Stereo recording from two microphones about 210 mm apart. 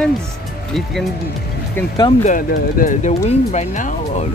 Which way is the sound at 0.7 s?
Centre (ahead or behind).